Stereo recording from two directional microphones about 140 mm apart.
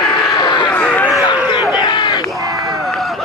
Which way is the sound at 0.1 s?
30° left (ahead or behind).